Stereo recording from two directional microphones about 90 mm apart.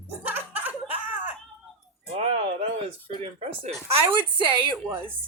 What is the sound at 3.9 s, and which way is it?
Speech, 70° right (ahead or behind).